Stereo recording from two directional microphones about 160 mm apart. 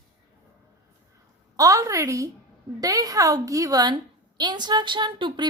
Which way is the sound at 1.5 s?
20° right (ahead or behind).